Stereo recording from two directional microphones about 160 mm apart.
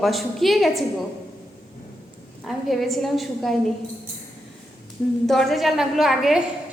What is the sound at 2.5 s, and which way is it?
A woman's voice, centre (ahead or behind).